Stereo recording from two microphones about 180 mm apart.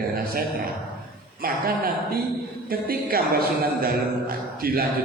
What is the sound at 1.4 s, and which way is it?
A man's voice, 55° right (ahead or behind).